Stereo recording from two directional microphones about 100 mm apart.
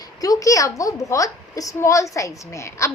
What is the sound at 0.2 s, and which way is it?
A woman's voice, 35° left (ahead or behind).